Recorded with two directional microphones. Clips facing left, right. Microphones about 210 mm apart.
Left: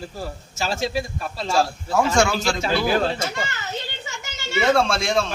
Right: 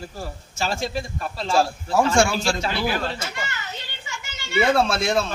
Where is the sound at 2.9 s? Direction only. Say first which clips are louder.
Left 6 dB; 45° left (ahead or behind).